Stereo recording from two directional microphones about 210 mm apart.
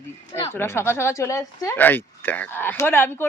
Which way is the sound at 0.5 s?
10° left (ahead or behind).